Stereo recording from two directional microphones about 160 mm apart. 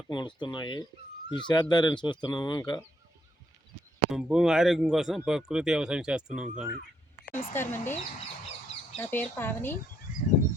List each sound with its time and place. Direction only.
0.1 s speech: 30° left (ahead or behind)
4.1 s speech: 5° right (ahead or behind)
7.3 s speech: 15° left (ahead or behind)
9.0 s speech: 10° left (ahead or behind)